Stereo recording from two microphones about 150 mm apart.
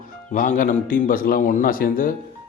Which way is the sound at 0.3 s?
60° left (ahead or behind).